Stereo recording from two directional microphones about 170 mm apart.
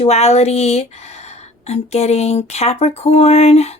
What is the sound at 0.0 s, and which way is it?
A woman's voice, 40° left (ahead or behind).